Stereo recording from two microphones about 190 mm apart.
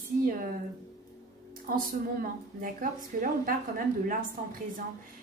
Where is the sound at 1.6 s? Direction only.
45° right (ahead or behind).